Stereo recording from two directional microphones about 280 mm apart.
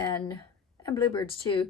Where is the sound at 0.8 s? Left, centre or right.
Centre.